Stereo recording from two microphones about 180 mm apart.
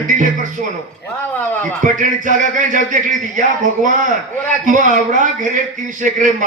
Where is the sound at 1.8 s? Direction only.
45° right (ahead or behind).